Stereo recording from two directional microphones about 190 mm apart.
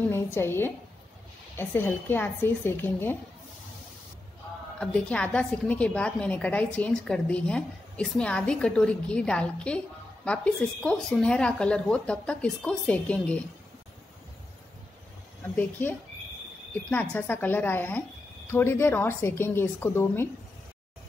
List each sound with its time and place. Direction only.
0.1 s a woman's voice: 10° left (ahead or behind)
4.7 s a woman's voice: 5° left (ahead or behind)
15.4 s a woman's voice: 10° left (ahead or behind)